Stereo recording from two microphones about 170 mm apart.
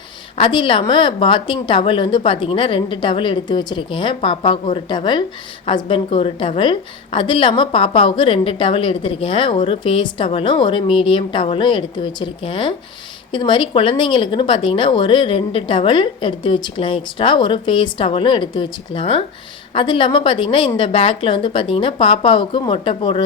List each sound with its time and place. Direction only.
0.3 s a woman's voice: 30° left (ahead or behind)